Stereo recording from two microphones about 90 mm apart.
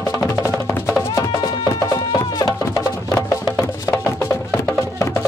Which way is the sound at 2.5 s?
30° left (ahead or behind).